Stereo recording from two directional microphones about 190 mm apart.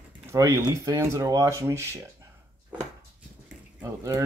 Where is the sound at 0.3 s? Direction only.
15° right (ahead or behind).